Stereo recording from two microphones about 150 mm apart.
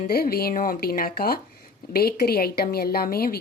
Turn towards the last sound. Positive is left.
turn(degrees=85)